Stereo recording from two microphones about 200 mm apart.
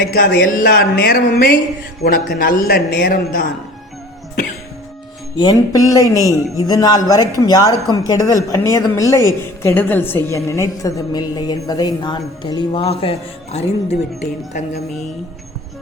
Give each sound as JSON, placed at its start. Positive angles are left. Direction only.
{"t": 0.0, "sound": "speech", "side_deg": 50}
{"t": 5.4, "sound": "a man's voice", "side_deg": 20}